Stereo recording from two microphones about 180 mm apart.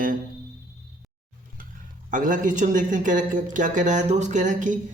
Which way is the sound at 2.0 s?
45° right (ahead or behind).